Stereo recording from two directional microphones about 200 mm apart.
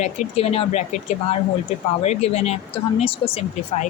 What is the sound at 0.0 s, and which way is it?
Speech, 30° left (ahead or behind).